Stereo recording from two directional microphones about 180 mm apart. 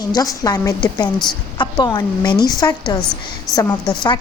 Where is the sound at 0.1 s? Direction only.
20° left (ahead or behind).